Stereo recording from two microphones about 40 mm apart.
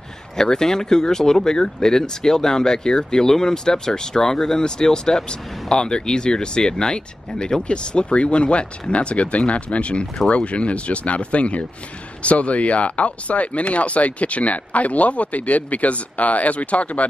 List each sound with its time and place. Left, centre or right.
0.4 s speech: centre; by 17.1 s left